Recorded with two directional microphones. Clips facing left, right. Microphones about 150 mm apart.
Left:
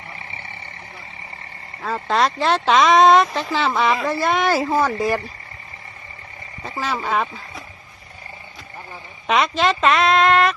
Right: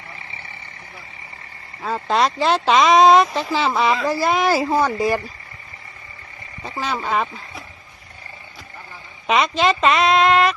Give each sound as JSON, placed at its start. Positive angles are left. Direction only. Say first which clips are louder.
{"t": 1.8, "sound": "speech", "louder": "even", "side_deg": 0}
{"t": 6.7, "sound": "speech", "louder": "even", "side_deg": 0}
{"t": 9.2, "sound": "speech", "louder": "right 1 dB", "side_deg": 0}